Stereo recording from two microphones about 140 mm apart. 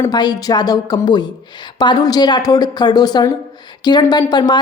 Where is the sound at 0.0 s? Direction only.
30° left (ahead or behind).